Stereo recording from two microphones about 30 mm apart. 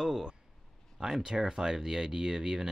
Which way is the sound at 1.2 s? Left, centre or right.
Right.